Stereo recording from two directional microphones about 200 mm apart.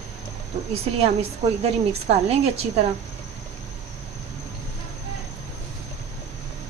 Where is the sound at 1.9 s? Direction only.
30° right (ahead or behind).